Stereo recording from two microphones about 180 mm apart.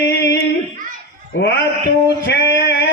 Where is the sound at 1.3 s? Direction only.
70° left (ahead or behind).